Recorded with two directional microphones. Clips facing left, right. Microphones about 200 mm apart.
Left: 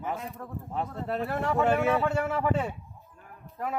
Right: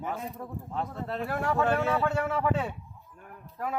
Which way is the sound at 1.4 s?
5° right (ahead or behind).